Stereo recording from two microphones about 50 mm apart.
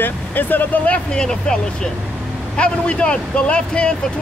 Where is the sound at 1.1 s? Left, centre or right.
Centre.